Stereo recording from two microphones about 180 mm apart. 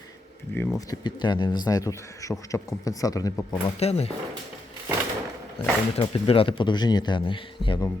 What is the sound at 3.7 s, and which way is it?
Speech, 35° left (ahead or behind).